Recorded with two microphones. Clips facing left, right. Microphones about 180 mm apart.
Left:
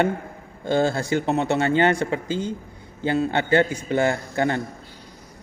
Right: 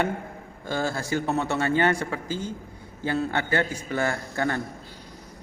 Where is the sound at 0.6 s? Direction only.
25° left (ahead or behind).